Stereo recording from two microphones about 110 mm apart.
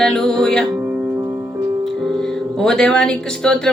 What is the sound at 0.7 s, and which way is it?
Music, 15° right (ahead or behind).